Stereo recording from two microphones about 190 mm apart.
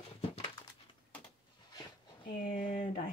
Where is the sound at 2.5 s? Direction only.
40° left (ahead or behind).